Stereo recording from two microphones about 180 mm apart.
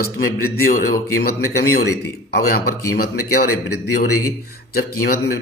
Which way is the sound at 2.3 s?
60° left (ahead or behind).